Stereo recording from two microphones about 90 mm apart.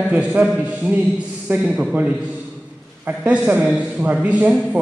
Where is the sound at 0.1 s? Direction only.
15° right (ahead or behind).